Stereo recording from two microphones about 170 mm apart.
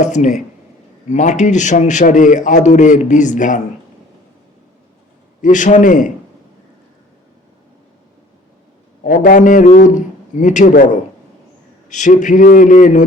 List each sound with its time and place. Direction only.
0.0 s a man's voice: 45° left (ahead or behind)
5.4 s a man's voice: 50° left (ahead or behind)
9.0 s a man's voice: 50° left (ahead or behind)